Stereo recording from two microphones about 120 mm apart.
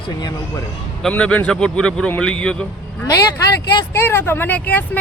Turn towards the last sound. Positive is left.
turn(degrees=15)  # may be behind; listen again after turning